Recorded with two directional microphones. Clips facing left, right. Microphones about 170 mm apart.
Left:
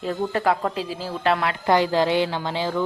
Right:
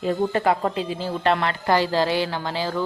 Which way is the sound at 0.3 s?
Centre (ahead or behind).